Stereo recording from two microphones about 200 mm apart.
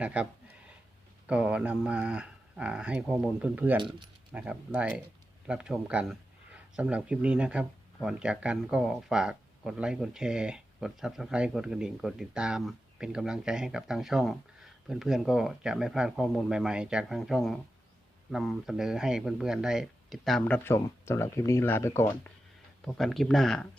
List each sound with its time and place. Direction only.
0.0 s speech: 5° right (ahead or behind)
3.8 s speech: 25° right (ahead or behind)
4.3 s speech: 5° right (ahead or behind); by 22.3 s 15° left (ahead or behind)
22.9 s speech: centre (ahead or behind)